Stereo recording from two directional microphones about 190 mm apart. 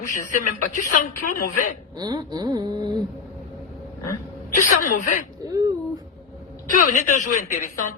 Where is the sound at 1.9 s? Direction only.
20° right (ahead or behind).